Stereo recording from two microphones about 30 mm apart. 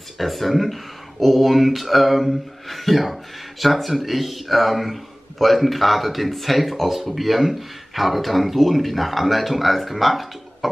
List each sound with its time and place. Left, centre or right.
0.2 s speech: centre